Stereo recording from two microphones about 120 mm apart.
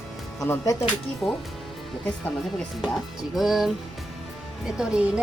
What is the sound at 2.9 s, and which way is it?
Speech, 5° right (ahead or behind).